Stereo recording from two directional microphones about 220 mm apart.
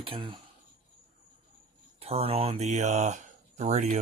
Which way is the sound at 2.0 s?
25° right (ahead or behind).